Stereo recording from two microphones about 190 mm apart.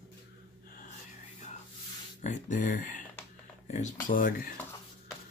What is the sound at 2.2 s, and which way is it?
Speech, 40° left (ahead or behind).